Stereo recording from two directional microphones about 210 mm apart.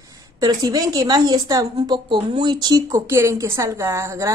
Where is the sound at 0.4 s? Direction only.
20° right (ahead or behind).